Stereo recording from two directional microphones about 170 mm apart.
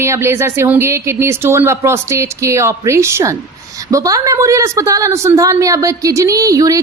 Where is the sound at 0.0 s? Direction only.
15° right (ahead or behind).